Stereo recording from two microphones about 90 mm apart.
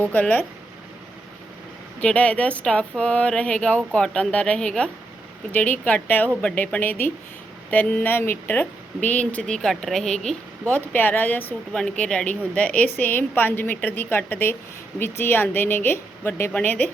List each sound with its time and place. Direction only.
0.0 s a woman's voice: 20° left (ahead or behind)
2.0 s a woman's voice: 15° left (ahead or behind)
10.8 s a woman's voice: 20° left (ahead or behind)
11.7 s a woman's voice: 5° left (ahead or behind)